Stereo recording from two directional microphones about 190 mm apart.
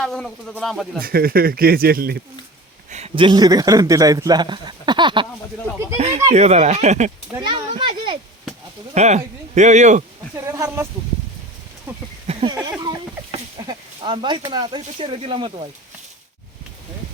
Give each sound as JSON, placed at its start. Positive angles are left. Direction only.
{"t": 0.0, "sound": "speech", "side_deg": 5}
{"t": 0.9, "sound": "speech", "side_deg": -50}
{"t": 2.9, "sound": "a man's voice", "side_deg": -30}
{"t": 7.4, "sound": "a man's voice", "side_deg": -25}
{"t": 7.7, "sound": "a sound", "side_deg": -25}
{"t": 9.0, "sound": "speech", "side_deg": -35}
{"t": 10.3, "sound": "speech", "side_deg": -15}
{"t": 11.9, "sound": "a sound", "side_deg": -10}
{"t": 12.3, "sound": "a sound", "side_deg": -30}
{"t": 13.6, "sound": "a man's voice", "side_deg": -25}